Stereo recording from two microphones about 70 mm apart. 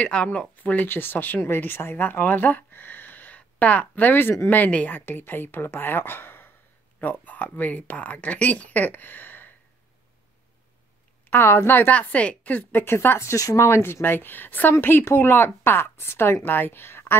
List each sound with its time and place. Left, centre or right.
0.0 s speech: centre
11.2 s a woman's voice: left
11.9 s speech: centre
13.2 s speech: left
13.6 s a woman's voice: left